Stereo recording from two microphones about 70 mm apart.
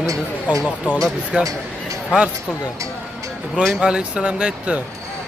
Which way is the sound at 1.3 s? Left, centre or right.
Centre.